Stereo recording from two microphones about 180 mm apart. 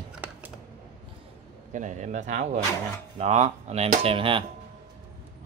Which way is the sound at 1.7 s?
45° right (ahead or behind).